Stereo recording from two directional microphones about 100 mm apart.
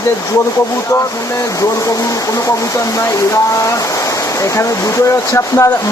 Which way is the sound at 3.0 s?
30° left (ahead or behind).